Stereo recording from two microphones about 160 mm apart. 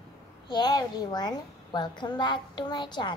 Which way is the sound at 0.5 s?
25° left (ahead or behind).